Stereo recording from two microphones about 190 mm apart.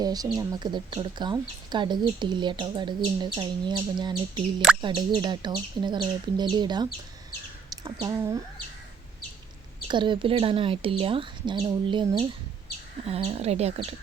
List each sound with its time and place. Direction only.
0.0 s speech: 20° right (ahead or behind)
7.9 s speech: 20° right (ahead or behind)
9.9 s speech: 25° right (ahead or behind)